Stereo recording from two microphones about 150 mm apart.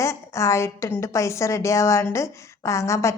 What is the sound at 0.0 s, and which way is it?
A woman's voice, 20° left (ahead or behind).